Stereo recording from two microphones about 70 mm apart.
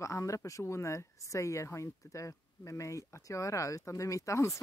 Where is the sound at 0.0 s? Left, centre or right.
Left.